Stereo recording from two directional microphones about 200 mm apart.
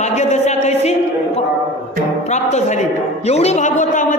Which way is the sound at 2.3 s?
35° left (ahead or behind).